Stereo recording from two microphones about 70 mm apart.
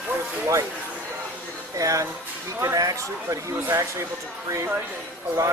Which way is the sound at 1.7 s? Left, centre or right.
Right.